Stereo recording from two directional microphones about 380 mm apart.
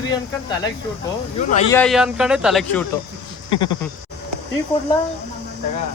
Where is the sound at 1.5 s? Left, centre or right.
Centre.